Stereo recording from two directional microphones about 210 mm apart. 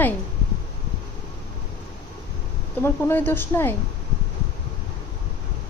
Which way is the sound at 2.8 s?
10° left (ahead or behind).